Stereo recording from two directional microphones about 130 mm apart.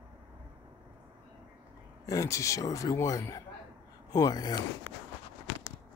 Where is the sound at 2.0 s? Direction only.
25° left (ahead or behind).